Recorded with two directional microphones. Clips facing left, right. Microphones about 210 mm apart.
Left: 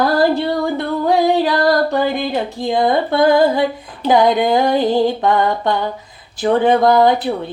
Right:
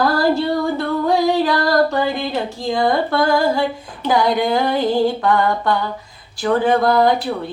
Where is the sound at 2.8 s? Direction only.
20° left (ahead or behind).